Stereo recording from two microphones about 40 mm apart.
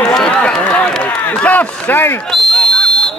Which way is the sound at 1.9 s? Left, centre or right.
Left.